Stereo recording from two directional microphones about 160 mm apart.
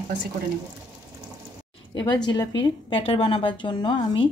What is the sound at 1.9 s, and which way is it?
A woman's voice, 25° left (ahead or behind).